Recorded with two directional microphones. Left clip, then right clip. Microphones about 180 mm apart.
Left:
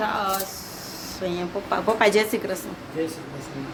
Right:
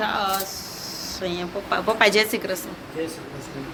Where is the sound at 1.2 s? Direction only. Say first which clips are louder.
Left 1 dB; 20° left (ahead or behind).